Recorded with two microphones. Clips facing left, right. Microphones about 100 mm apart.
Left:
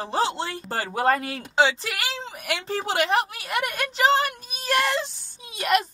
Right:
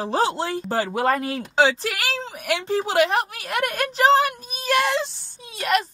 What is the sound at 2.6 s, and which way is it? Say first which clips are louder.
Speech: right 4 dB; 35° right (ahead or behind).